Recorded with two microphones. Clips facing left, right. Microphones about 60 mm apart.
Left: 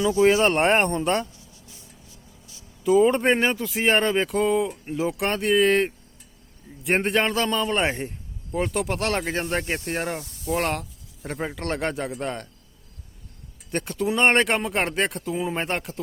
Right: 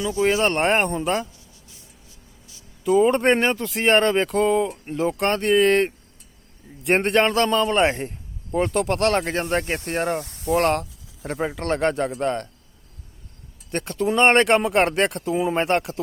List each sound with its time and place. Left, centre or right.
0.0 s speech: centre
2.8 s speech: centre
10.2 s speech: right
10.5 s speech: centre
13.7 s speech: centre